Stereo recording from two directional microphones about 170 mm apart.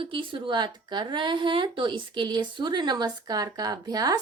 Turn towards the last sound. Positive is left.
turn(degrees=-20)  # may be behind; listen again after turning